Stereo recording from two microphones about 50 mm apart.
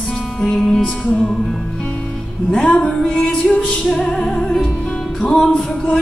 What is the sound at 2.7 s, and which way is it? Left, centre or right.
Music, centre.